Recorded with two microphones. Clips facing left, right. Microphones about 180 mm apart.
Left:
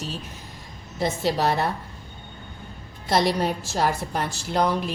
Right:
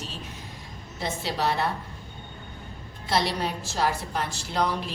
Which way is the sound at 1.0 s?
45° left (ahead or behind).